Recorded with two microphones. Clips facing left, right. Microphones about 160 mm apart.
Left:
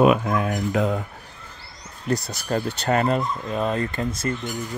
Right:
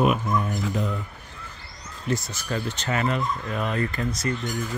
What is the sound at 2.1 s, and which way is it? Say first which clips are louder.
Speech: left 4 dB; 35° left (ahead or behind).